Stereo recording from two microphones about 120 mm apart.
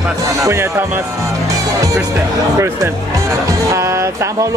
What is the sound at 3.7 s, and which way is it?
Speech, 25° right (ahead or behind).